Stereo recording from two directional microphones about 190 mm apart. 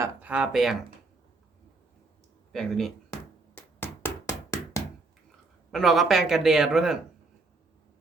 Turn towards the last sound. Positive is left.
turn(degrees=-5)  # may be behind; listen again after turning